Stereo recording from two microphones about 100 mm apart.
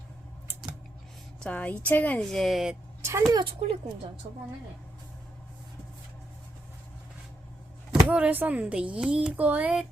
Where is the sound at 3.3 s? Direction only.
50° right (ahead or behind).